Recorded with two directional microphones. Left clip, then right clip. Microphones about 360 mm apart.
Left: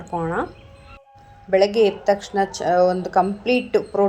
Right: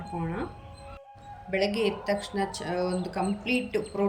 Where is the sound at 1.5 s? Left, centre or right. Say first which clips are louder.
Left 11 dB; centre.